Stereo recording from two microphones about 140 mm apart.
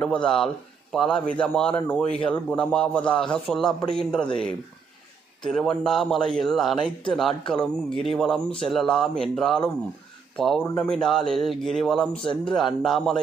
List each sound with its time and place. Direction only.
0.0 s a man's voice: 5° left (ahead or behind)
5.4 s speech: 5° left (ahead or behind)
6.8 s speech: 35° left (ahead or behind)
7.2 s speech: 5° left (ahead or behind)